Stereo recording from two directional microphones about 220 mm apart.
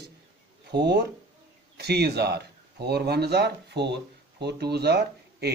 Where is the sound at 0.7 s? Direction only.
50° right (ahead or behind).